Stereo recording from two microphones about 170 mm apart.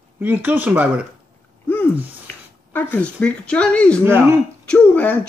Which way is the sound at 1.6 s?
10° left (ahead or behind).